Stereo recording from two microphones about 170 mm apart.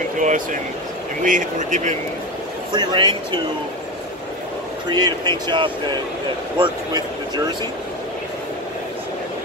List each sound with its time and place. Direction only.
0.2 s speech: 50° right (ahead or behind)
2.7 s speech: 25° right (ahead or behind)
4.8 s speech: 25° right (ahead or behind)